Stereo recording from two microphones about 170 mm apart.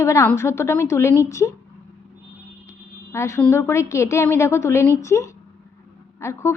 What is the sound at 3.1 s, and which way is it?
A woman's voice, 15° left (ahead or behind).